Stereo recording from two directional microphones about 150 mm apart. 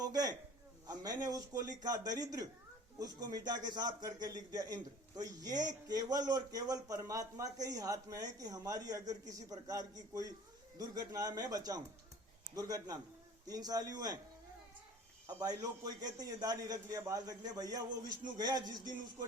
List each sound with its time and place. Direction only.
0.0 s a man's voice: 25° right (ahead or behind)
15.4 s a man's voice: 25° right (ahead or behind)